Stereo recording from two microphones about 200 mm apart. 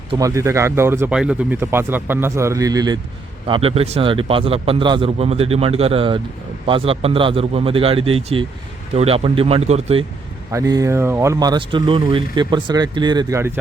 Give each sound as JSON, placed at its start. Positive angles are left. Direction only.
{"t": 0.1, "sound": "speech", "side_deg": -15}
{"t": 10.5, "sound": "speech", "side_deg": -15}